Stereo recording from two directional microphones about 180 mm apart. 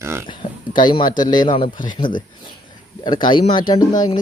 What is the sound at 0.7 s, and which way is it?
Speech, 25° left (ahead or behind).